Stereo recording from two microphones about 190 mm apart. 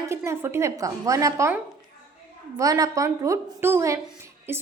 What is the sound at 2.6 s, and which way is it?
A woman's voice, 20° right (ahead or behind).